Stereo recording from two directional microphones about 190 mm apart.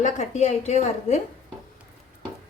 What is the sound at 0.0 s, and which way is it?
Speech, 40° left (ahead or behind).